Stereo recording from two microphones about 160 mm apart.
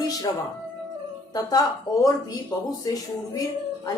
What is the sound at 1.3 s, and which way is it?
Speech, 25° left (ahead or behind).